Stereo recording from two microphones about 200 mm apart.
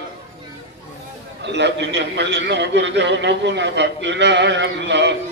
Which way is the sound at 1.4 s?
60° right (ahead or behind).